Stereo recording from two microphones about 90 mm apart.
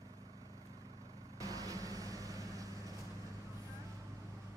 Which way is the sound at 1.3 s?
40° right (ahead or behind).